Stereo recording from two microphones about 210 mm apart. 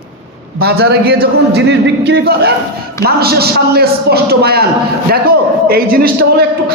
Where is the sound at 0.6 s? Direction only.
50° right (ahead or behind).